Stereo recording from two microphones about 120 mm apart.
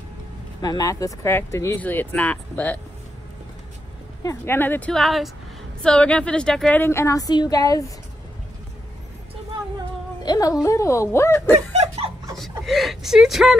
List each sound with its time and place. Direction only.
0.6 s speech: 30° left (ahead or behind); by 2.8 s 15° left (ahead or behind)
4.2 s speech: 25° left (ahead or behind); by 6.8 s 5° left (ahead or behind)
6.8 s a woman's voice: 20° left (ahead or behind)
10.2 s speech: 30° left (ahead or behind)
12.6 s speech: centre (ahead or behind)